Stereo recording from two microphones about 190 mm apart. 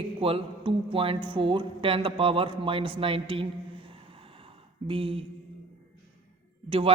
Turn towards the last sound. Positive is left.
turn(degrees=-30)  # may be behind; listen again after turning